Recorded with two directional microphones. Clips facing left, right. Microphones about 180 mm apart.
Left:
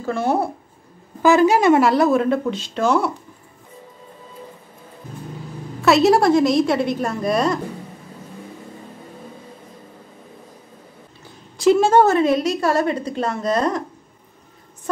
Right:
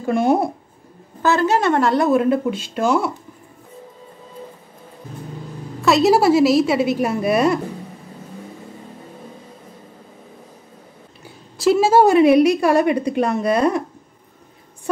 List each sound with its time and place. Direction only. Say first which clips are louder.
0.0 s speech: right 3 dB; 15° right (ahead or behind)
1.2 s a woman's voice: left 3 dB; 10° left (ahead or behind); by 3.1 s 5° right (ahead or behind)
5.8 s a woman's voice: even; centre (ahead or behind)
11.2 s a woman's voice: left 1 dB; 5° right (ahead or behind)